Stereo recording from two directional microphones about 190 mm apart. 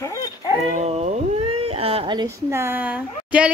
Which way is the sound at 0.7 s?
35° right (ahead or behind).